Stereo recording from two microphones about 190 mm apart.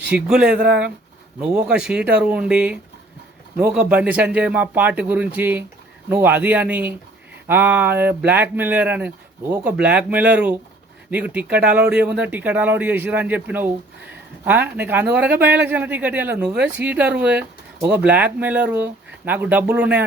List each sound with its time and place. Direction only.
0.1 s speech: 5° right (ahead or behind)